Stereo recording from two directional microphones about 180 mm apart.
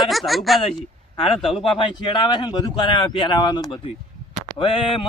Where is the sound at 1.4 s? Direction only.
30° left (ahead or behind).